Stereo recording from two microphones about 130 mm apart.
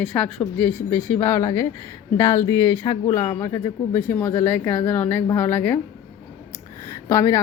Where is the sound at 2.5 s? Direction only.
35° left (ahead or behind).